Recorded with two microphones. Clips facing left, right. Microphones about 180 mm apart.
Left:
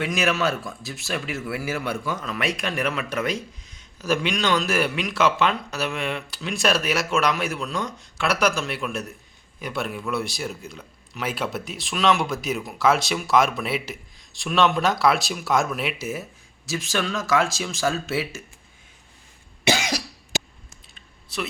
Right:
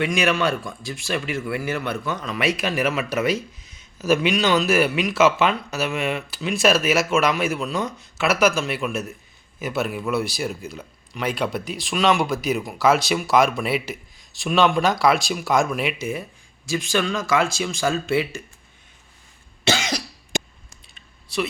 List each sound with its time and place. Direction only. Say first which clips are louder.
0.0 s speech: right 2 dB; centre (ahead or behind)
19.6 s cough: even; 15° left (ahead or behind)
20.3 s clicking: right 3 dB; 5° left (ahead or behind)
20.9 s typing: right 6 dB; centre (ahead or behind)